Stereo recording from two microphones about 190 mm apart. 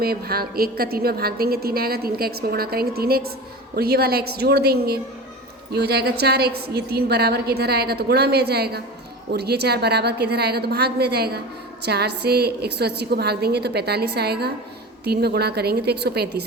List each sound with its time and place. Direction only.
0.0 s a woman's voice: 55° right (ahead or behind)